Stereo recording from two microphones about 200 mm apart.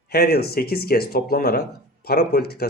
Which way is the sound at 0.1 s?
50° left (ahead or behind).